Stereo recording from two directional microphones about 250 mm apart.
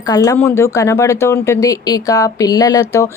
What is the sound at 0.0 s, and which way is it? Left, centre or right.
Speech, centre.